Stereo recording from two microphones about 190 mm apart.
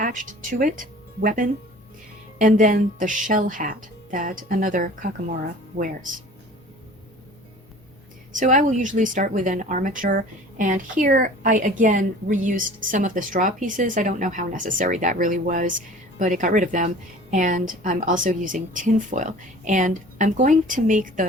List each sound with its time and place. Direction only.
0.0 s speech: 45° right (ahead or behind)
8.3 s speech: 40° right (ahead or behind)